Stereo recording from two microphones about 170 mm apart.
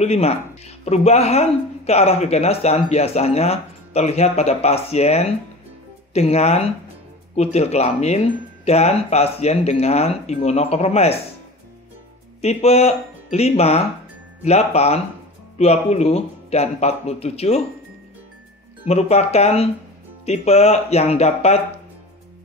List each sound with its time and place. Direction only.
0.0 s speech: 40° left (ahead or behind)
12.4 s speech: 40° left (ahead or behind)
18.9 s speech: 40° left (ahead or behind)